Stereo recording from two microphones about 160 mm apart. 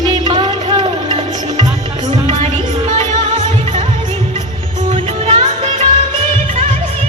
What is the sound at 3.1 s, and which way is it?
Music, 45° right (ahead or behind).